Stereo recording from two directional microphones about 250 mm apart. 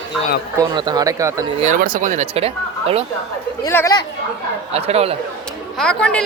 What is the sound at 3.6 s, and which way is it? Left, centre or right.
Speech, centre.